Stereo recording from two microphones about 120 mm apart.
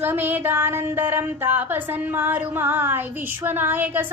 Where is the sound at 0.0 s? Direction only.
15° right (ahead or behind).